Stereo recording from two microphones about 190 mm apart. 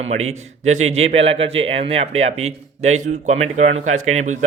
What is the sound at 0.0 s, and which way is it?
A man's voice, 35° right (ahead or behind).